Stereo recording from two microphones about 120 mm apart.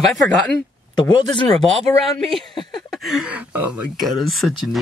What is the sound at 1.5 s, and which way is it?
Speech, centre (ahead or behind).